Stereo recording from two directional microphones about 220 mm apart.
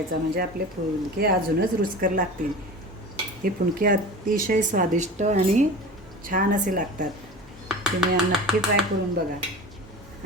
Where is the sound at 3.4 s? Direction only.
40° right (ahead or behind).